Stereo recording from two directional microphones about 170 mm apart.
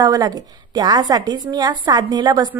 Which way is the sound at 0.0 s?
20° right (ahead or behind).